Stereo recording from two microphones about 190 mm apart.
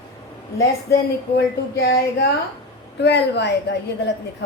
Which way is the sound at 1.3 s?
55° left (ahead or behind).